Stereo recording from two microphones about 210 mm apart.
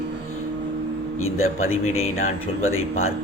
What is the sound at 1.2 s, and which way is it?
A man's voice, 80° left.